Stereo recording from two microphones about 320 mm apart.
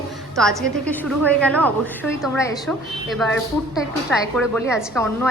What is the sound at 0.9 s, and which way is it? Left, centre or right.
A woman's voice, centre.